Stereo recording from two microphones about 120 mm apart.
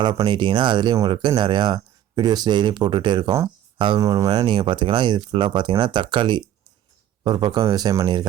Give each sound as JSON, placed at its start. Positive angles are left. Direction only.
{"t": 0.3, "sound": "speech", "side_deg": -40}
{"t": 3.9, "sound": "speech", "side_deg": -30}
{"t": 4.4, "sound": "speech", "side_deg": -45}